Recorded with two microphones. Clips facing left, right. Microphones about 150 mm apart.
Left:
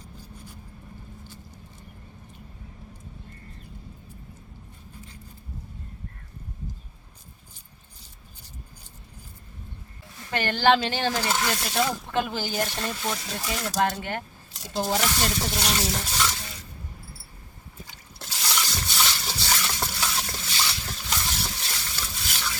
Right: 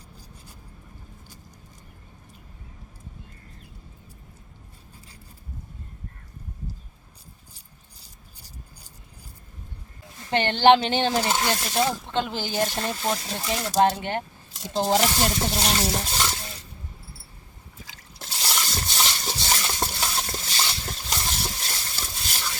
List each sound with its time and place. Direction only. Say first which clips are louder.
10.2 s speech: right 4 dB; 25° right (ahead or behind)
11.9 s speech: even; 5° left (ahead or behind)
12.5 s speech: right 3 dB; 30° right (ahead or behind)
18.3 s a sound: even; 30° right (ahead or behind)